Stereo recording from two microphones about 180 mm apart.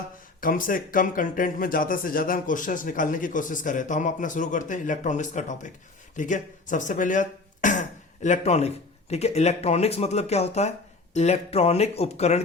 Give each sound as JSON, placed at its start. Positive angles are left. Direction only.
{"t": 0.4, "sound": "speech", "side_deg": 50}